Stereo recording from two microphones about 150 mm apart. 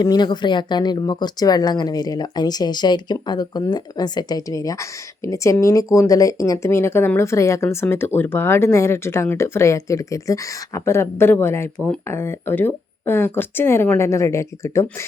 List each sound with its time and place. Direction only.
0.0 s a woman's voice: 30° left (ahead or behind)